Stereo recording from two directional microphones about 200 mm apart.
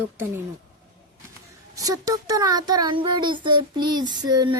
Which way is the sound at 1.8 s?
15° right (ahead or behind).